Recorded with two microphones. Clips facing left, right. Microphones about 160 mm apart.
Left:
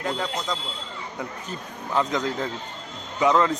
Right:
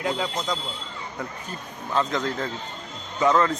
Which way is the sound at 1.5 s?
15° left (ahead or behind).